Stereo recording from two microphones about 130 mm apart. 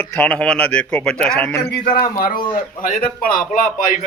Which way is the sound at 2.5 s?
80° left.